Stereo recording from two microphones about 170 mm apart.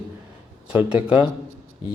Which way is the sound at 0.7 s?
5° right (ahead or behind).